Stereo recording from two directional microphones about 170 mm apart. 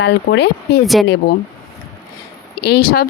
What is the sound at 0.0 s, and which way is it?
Speech, 80° left.